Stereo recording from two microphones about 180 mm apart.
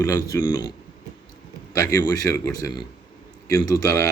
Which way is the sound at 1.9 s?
20° left (ahead or behind).